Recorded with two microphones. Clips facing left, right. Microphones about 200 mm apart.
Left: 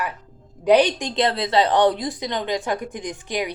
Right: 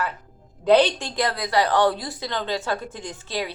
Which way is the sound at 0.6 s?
15° left (ahead or behind).